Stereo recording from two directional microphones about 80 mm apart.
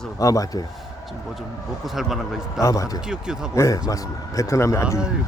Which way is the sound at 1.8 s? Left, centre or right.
Centre.